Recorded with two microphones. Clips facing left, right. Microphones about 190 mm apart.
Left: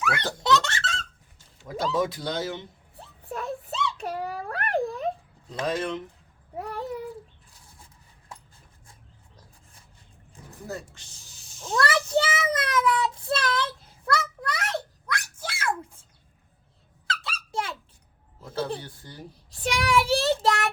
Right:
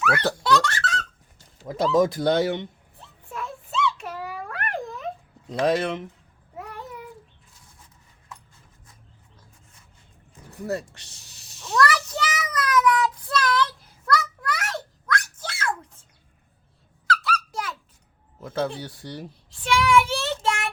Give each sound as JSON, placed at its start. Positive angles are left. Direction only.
{"t": 0.4, "sound": "baby laughter", "side_deg": 25}
{"t": 1.6, "sound": "speech", "side_deg": -40}
{"t": 2.2, "sound": "speech", "side_deg": -65}
{"t": 3.2, "sound": "a sound", "side_deg": 35}
{"t": 5.6, "sound": "speech", "side_deg": -75}
{"t": 6.6, "sound": "a sound", "side_deg": 35}
{"t": 10.7, "sound": "a sound", "side_deg": -70}
{"t": 11.7, "sound": "child singing", "side_deg": 25}
{"t": 17.1, "sound": "squeak", "side_deg": 25}
{"t": 18.4, "sound": "speech", "side_deg": -90}
{"t": 18.8, "sound": "speech", "side_deg": -80}
{"t": 19.5, "sound": "child singing", "side_deg": 40}